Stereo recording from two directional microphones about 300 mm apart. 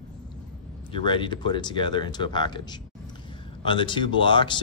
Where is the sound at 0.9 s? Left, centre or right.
Centre.